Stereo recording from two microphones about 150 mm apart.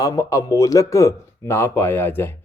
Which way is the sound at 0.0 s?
20° left (ahead or behind).